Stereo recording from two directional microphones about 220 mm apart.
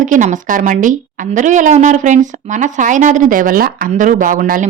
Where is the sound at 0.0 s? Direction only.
35° right (ahead or behind).